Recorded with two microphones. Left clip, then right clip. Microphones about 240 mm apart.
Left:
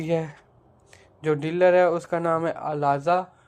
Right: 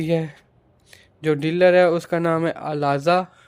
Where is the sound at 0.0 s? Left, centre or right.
Right.